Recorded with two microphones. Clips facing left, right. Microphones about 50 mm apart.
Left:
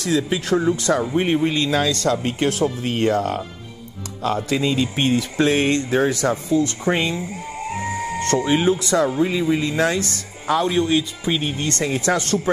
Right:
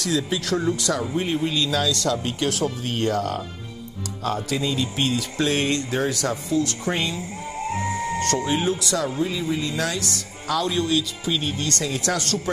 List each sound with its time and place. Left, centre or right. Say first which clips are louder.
0.0 s speech: left 3 dB; left
4.5 s speech: left 4 dB; left